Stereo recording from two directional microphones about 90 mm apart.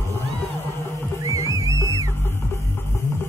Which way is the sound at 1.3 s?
35° right (ahead or behind).